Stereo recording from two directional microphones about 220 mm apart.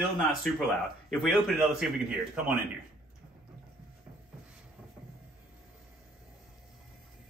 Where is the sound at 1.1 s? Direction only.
Centre (ahead or behind).